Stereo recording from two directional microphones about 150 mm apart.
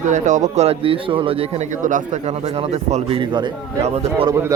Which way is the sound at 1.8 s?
55° right (ahead or behind).